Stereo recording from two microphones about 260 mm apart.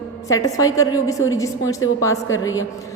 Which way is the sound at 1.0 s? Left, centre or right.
Left.